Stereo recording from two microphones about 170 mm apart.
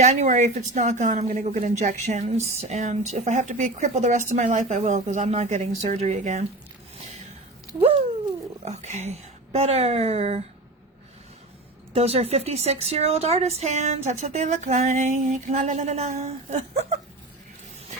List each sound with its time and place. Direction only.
0.0 s speech: 45° right (ahead or behind)
7.8 s a woman's voice: 35° right (ahead or behind)
11.9 s speech: 35° right (ahead or behind)